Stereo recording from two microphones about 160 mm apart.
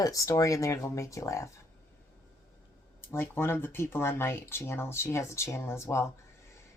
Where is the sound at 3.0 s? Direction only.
15° left (ahead or behind).